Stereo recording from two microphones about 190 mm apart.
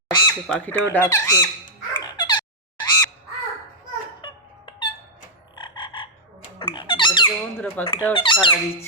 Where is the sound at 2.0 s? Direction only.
20° left (ahead or behind).